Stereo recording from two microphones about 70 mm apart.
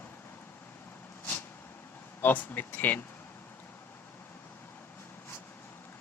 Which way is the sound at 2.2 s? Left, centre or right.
Left.